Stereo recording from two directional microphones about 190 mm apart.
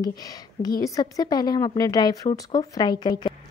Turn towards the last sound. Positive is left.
turn(degrees=25)  # may be behind; listen again after turning